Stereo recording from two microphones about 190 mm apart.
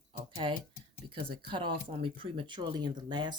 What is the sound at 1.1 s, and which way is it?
Speech, 25° right (ahead or behind).